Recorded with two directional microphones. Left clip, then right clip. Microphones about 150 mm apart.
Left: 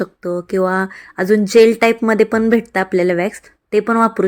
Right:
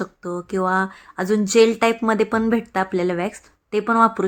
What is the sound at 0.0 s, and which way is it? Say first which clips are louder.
Speech: left 7 dB; 20° left (ahead or behind).